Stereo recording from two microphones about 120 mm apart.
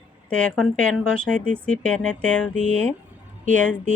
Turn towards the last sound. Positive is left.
turn(degrees=10)  # may be behind; listen again after turning